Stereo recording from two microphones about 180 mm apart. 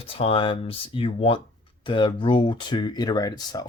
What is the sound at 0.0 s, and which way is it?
Speech, 30° left (ahead or behind).